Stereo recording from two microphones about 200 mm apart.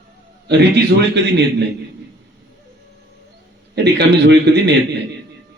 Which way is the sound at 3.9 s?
55° right (ahead or behind).